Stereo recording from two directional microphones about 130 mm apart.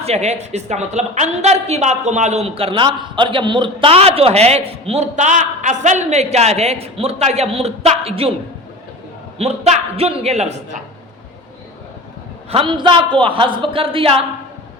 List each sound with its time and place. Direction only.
0.0 s a woman's voice: 55° right (ahead or behind)
9.4 s a woman's voice: 55° right (ahead or behind)
12.5 s a man's voice: 40° right (ahead or behind)